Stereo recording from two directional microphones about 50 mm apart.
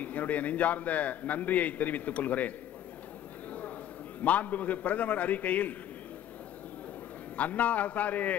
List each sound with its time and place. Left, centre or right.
0.0 s a man's voice: left
4.2 s a man's voice: left
7.3 s a man's voice: left